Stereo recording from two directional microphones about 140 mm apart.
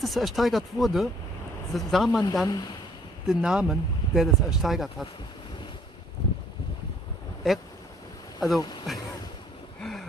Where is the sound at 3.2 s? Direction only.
5° right (ahead or behind).